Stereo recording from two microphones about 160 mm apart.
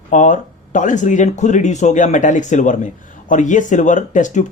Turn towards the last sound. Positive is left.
turn(degrees=50)  # may be behind; listen again after turning